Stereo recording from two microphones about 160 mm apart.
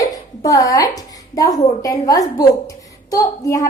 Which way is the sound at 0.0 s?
20° left (ahead or behind).